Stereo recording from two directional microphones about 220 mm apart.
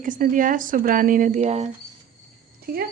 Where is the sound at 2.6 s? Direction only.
45° right (ahead or behind).